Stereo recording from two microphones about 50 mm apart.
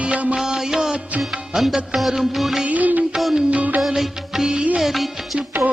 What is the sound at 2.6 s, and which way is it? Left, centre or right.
Music, right.